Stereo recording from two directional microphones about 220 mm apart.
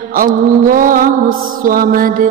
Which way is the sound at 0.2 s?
40° right (ahead or behind).